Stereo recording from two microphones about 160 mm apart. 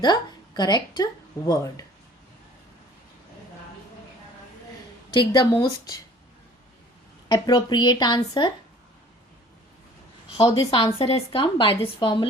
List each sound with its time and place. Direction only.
0.0 s speech: 25° left (ahead or behind)
5.1 s speech: 30° left (ahead or behind)
7.3 s speech: 25° left (ahead or behind)
10.4 s a woman's voice: 30° left (ahead or behind)